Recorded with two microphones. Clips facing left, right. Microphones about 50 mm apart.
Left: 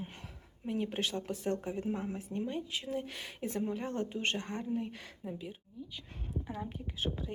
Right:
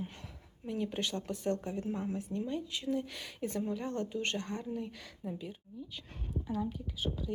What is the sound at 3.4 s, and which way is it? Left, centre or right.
Speech, centre.